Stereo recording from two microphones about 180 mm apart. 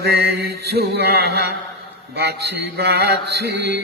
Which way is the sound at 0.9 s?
60° right (ahead or behind).